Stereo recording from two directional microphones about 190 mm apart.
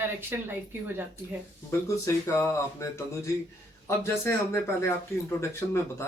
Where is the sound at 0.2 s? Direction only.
10° right (ahead or behind).